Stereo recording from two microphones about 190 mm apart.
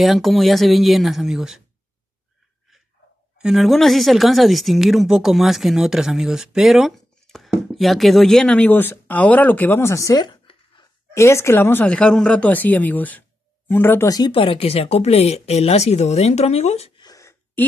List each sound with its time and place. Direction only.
0.0 s speech: centre (ahead or behind)
3.3 s speech: centre (ahead or behind); by 17.0 s 35° left (ahead or behind)
17.0 s a sound: 15° left (ahead or behind)